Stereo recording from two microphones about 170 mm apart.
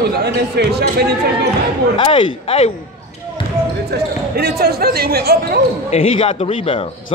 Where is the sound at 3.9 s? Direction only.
70° right (ahead or behind).